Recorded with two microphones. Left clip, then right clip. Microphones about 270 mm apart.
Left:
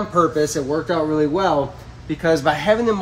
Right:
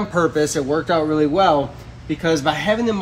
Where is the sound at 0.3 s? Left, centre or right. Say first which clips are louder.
Right 1 dB; centre.